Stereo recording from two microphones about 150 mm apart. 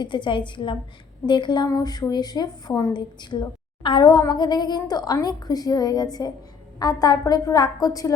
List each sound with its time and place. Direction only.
0.0 s a woman's voice: 30° left (ahead or behind)